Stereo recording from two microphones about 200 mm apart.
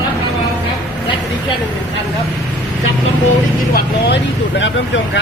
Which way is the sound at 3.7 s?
55° left (ahead or behind).